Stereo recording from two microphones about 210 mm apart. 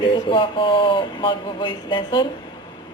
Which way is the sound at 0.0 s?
25° left (ahead or behind).